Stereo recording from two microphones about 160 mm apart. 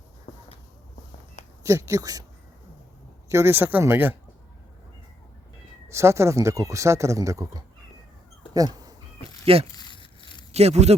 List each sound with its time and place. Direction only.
1.6 s speech: 20° right (ahead or behind)
3.2 s speech: 15° right (ahead or behind)
5.9 s speech: 15° right (ahead or behind)
9.4 s speech: 40° right (ahead or behind)
9.7 s a sound: 30° left (ahead or behind)
10.5 s speech: 40° right (ahead or behind)